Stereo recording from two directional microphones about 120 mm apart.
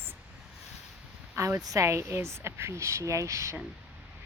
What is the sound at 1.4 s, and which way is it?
A woman's voice, 25° right (ahead or behind).